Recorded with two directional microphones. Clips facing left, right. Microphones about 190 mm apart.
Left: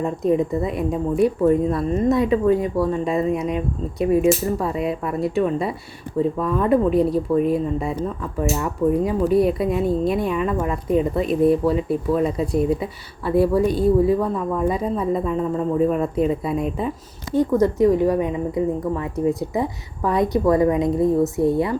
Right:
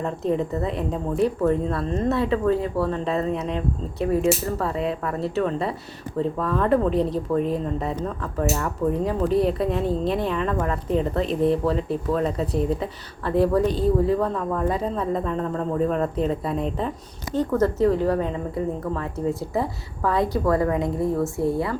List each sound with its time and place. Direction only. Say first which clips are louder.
0.0 s speech: left 4 dB; 15° left (ahead or behind)